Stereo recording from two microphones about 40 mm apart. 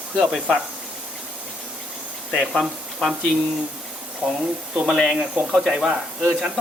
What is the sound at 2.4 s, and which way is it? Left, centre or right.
Speech, centre.